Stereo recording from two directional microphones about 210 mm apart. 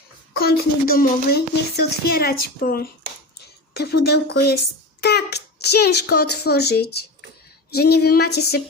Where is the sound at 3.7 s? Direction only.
50° left (ahead or behind).